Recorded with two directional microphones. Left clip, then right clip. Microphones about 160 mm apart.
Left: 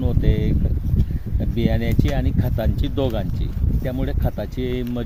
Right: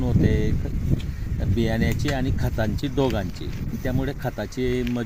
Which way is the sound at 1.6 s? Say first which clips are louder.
Left 2 dB; 30° left (ahead or behind).